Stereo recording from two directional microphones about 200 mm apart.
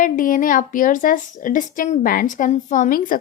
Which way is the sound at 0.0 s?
40° left (ahead or behind).